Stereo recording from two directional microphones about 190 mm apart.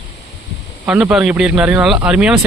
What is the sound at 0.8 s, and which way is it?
Speech, 5° right (ahead or behind).